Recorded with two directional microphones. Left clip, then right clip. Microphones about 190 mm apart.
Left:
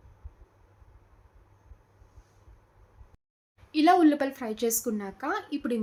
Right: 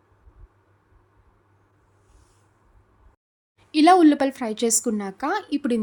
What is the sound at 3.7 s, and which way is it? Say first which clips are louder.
A woman's voice: right 6 dB; 55° right (ahead or behind).